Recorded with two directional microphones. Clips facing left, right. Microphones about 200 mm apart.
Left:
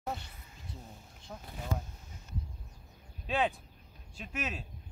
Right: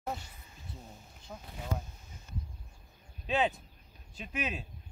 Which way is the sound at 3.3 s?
Centre (ahead or behind).